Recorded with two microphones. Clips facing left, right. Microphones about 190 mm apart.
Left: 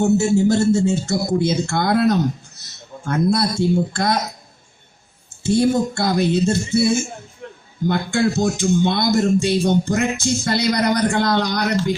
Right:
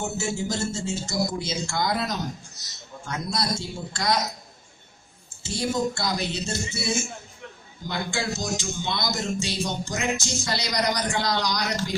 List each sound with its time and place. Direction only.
0.0 s speech: 60° left (ahead or behind)
5.4 s speech: 55° left (ahead or behind)